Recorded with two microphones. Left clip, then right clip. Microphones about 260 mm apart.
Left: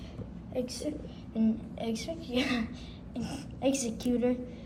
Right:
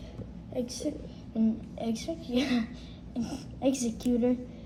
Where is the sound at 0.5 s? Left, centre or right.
Left.